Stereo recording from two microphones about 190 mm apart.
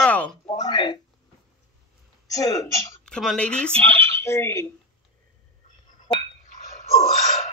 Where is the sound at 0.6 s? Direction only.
20° left (ahead or behind).